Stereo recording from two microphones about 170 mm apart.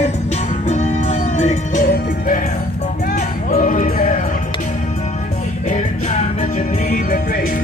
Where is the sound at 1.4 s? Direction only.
50° left (ahead or behind).